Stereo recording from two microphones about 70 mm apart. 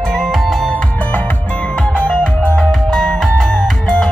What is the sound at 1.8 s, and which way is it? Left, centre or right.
Music, centre.